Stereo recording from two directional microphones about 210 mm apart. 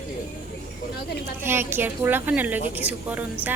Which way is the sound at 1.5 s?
10° right (ahead or behind).